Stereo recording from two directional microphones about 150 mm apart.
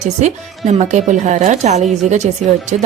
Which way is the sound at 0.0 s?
50° right (ahead or behind).